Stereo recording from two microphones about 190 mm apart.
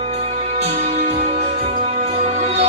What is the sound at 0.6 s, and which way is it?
Music, 35° right (ahead or behind).